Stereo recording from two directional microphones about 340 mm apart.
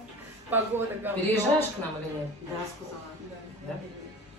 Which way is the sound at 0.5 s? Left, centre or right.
Centre.